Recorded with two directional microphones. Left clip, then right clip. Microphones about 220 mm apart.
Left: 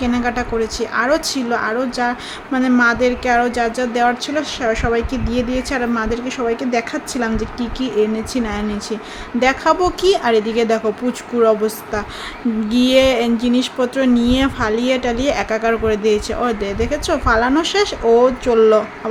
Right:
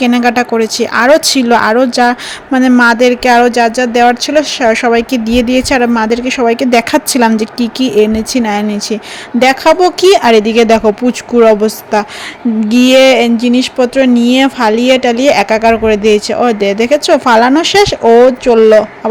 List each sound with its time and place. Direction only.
0.0 s speech: 35° right (ahead or behind)